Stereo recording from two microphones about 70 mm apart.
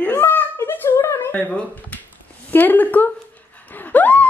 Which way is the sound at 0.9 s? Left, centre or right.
Left.